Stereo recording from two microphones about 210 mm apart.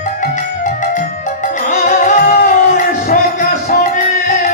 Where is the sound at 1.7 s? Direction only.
40° left (ahead or behind).